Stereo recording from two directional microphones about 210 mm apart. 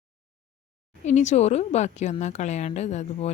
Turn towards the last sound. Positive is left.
turn(degrees=30)  # may be behind; listen again after turning